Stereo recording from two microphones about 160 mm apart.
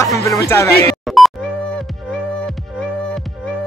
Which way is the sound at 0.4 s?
20° left (ahead or behind).